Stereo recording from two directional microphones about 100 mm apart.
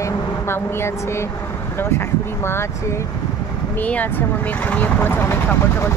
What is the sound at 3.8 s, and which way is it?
Speech, 15° left (ahead or behind).